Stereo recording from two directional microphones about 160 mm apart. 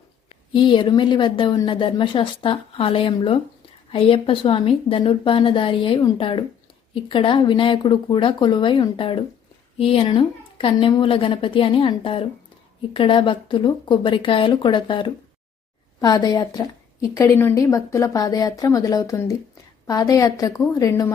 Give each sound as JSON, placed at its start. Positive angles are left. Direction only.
{"t": 0.5, "sound": "a woman's voice", "side_deg": 30}